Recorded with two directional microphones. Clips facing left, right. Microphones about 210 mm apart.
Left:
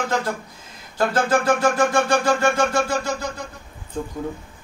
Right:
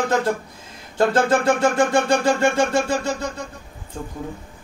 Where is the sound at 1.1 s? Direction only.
25° right (ahead or behind).